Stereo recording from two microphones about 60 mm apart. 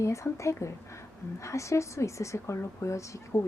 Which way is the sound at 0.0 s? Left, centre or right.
Left.